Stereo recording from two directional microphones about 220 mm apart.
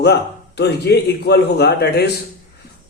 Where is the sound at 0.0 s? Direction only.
50° left (ahead or behind).